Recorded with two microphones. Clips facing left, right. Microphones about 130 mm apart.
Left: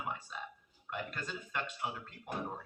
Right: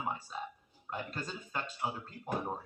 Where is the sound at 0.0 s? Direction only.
35° right (ahead or behind).